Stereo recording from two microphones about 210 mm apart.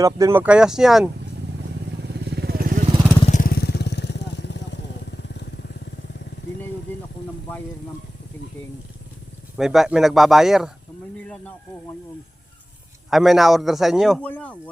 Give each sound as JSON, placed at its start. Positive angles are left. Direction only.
{"t": 0.0, "sound": "a man's voice", "side_deg": -15}
{"t": 2.0, "sound": "vehicle", "side_deg": -50}
{"t": 3.2, "sound": "vehicle", "side_deg": 40}
{"t": 9.6, "sound": "a man's voice", "side_deg": 0}
{"t": 13.1, "sound": "a man's voice", "side_deg": 0}